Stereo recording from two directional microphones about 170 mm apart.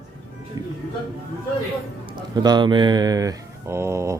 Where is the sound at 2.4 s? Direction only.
25° right (ahead or behind).